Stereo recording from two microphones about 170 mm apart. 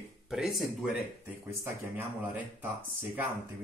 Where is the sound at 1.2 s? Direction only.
15° right (ahead or behind).